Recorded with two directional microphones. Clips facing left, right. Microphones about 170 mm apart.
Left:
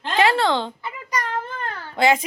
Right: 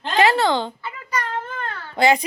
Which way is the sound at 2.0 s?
Centre (ahead or behind).